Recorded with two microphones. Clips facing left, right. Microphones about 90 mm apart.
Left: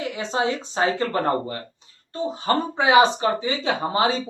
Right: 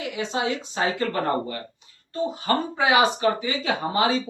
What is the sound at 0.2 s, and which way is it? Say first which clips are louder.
Speech: left 2 dB; 35° left (ahead or behind).